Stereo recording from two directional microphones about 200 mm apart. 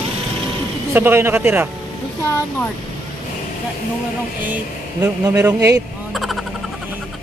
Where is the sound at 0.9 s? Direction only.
10° right (ahead or behind).